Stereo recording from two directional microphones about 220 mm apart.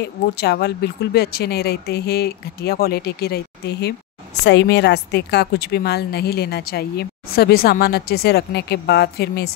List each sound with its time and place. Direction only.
0.4 s a woman's voice: 50° left (ahead or behind)